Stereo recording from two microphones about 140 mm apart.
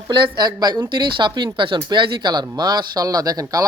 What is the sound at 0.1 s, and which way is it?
Speech, 30° right (ahead or behind).